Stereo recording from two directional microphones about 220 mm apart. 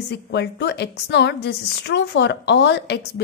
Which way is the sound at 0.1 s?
50° left (ahead or behind).